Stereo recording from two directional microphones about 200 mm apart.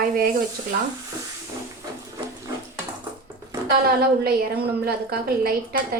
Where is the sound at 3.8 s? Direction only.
50° right (ahead or behind).